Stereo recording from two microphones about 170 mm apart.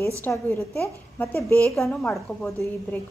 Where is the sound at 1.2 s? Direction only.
10° left (ahead or behind).